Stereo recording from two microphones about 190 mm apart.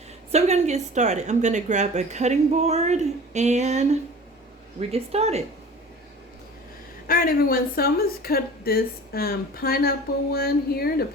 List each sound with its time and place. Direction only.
0.3 s speech: 35° right (ahead or behind)
4.9 s speech: 35° right (ahead or behind)
7.1 s a woman's voice: 50° left (ahead or behind)